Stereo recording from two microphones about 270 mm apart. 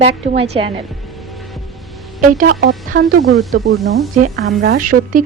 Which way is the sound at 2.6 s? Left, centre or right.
Right.